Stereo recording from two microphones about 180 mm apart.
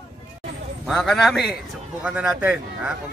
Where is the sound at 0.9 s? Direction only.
Centre (ahead or behind).